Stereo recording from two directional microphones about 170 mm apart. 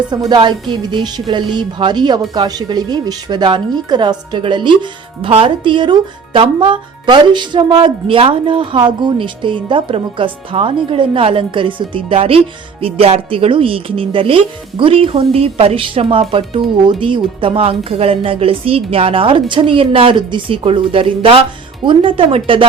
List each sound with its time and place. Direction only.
0.1 s a woman's voice: 25° right (ahead or behind)